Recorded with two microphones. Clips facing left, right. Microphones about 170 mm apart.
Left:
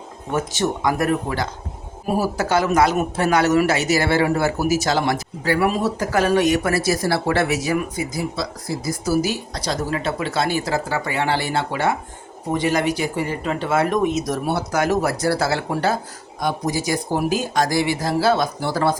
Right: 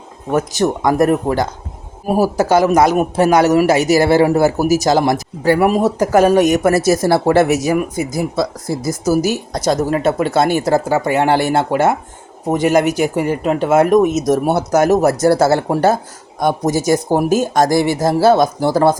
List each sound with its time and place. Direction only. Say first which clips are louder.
0.3 s a man's voice: right 6 dB; 40° right (ahead or behind)